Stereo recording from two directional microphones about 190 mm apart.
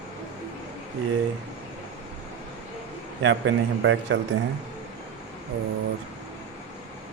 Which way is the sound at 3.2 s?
75° right (ahead or behind).